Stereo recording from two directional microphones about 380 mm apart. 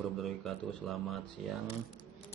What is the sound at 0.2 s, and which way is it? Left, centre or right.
Speech, centre.